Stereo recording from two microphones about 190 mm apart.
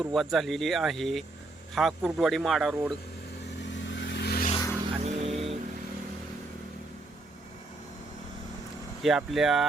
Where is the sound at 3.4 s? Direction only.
65° left (ahead or behind).